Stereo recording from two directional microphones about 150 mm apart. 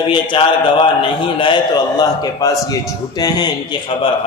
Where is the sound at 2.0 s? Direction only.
25° left (ahead or behind).